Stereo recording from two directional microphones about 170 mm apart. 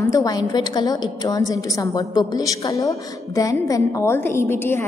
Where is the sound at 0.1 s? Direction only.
20° left (ahead or behind).